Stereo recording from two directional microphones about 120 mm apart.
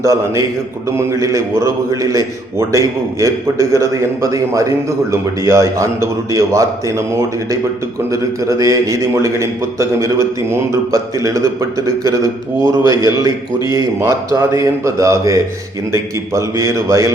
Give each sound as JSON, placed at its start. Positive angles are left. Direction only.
{"t": 0.0, "sound": "a man's voice", "side_deg": -25}